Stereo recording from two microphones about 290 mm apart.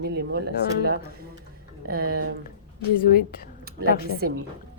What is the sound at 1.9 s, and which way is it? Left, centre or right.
Speech, right.